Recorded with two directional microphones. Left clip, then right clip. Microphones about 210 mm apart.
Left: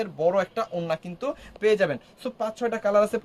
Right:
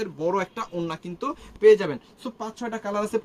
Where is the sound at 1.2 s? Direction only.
45° left (ahead or behind).